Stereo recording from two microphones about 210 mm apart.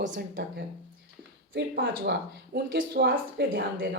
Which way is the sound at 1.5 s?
55° right (ahead or behind).